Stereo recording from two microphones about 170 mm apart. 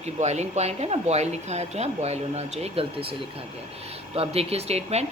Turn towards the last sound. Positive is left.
turn(degrees=-40)  # may be behind; listen again after turning